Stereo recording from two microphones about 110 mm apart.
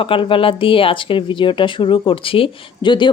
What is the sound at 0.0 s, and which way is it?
Speech, 55° left (ahead or behind).